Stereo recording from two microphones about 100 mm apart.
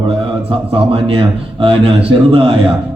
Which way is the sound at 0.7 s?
65° right (ahead or behind).